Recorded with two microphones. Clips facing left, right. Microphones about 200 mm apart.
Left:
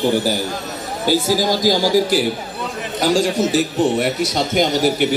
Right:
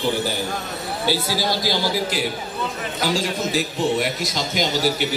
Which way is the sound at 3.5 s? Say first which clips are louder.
Left 5 dB; 55° left (ahead or behind).